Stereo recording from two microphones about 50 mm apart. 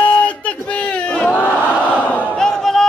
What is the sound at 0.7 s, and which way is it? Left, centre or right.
Crowd, left.